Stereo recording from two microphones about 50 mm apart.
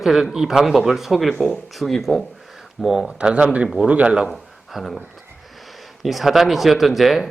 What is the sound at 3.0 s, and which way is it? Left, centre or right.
Speech, right.